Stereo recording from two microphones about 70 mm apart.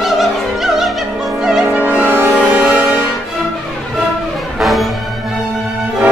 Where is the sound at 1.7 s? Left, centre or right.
Right.